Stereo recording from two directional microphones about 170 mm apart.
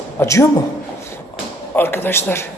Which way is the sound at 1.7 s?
15° left (ahead or behind).